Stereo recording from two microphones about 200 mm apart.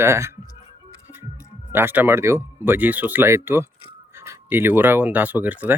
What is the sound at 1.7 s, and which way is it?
Speech, 10° right (ahead or behind).